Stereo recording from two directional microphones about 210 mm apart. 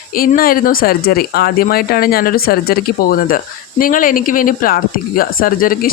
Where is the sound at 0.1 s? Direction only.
45° left (ahead or behind).